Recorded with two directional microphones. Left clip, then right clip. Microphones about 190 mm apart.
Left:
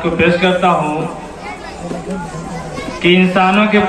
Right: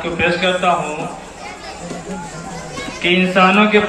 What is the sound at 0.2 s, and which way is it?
Speech, 30° left (ahead or behind).